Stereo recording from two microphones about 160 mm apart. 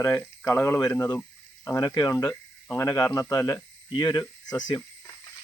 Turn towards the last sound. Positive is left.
turn(degrees=20)  # may be behind; listen again after turning